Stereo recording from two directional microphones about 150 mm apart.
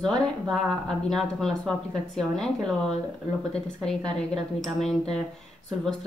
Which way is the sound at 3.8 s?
5° left (ahead or behind).